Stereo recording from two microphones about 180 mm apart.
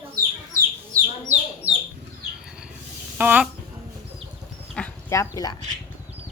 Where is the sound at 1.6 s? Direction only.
10° right (ahead or behind).